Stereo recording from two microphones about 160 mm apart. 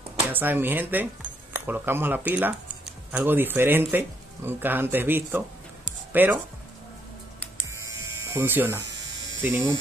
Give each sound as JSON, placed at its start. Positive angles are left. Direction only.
{"t": 0.3, "sound": "speech", "side_deg": -10}
{"t": 7.9, "sound": "a sound", "side_deg": -15}
{"t": 9.4, "sound": "speech", "side_deg": -10}